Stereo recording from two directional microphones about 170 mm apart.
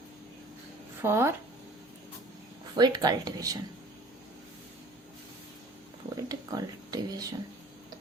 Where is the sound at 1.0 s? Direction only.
15° right (ahead or behind).